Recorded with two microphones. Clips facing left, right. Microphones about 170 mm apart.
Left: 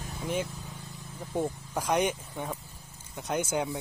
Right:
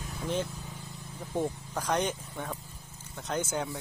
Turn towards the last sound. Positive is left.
turn(degrees=15)  # may be behind; listen again after turning